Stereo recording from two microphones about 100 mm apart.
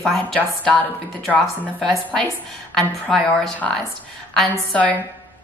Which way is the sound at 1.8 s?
5° left (ahead or behind).